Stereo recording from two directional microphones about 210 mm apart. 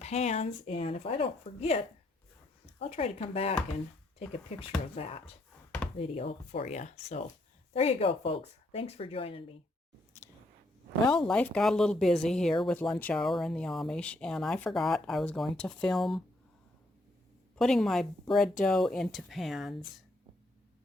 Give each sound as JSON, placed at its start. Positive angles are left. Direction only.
{"t": 0.0, "sound": "speech", "side_deg": 30}
{"t": 4.9, "sound": "speech", "side_deg": 30}
{"t": 11.3, "sound": "speech", "side_deg": 5}
{"t": 17.6, "sound": "speech", "side_deg": 0}